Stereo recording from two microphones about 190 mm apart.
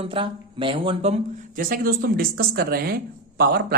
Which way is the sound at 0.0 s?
30° right (ahead or behind).